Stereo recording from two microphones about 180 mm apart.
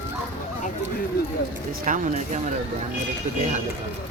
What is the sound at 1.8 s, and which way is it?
Speech, 45° right (ahead or behind).